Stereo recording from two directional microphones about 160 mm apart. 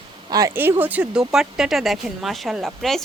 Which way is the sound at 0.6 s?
10° right (ahead or behind).